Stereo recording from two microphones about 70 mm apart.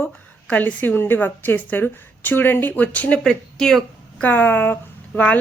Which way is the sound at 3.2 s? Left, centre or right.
Centre.